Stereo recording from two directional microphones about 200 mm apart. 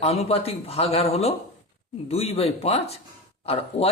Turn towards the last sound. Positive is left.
turn(degrees=30)  # may be behind; listen again after turning